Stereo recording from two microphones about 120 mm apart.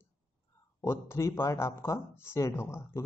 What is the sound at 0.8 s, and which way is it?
A man's voice, 25° left (ahead or behind).